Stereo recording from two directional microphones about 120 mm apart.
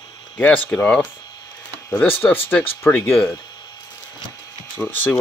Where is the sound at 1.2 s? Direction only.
30° left (ahead or behind).